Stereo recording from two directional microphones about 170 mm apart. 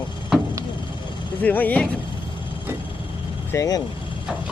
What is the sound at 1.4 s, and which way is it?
Speech, 10° left (ahead or behind).